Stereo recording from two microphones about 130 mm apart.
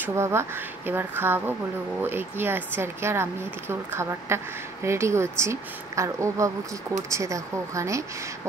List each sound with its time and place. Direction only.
0.0 s speech: 20° right (ahead or behind)